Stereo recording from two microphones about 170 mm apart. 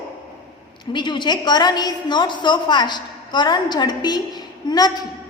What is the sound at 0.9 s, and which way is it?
A woman's voice, 25° left (ahead or behind).